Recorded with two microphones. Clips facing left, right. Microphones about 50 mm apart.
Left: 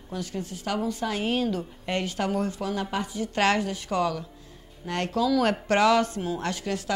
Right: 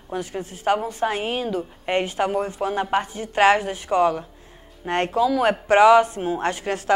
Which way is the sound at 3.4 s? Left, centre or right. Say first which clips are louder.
Right 7 dB; right.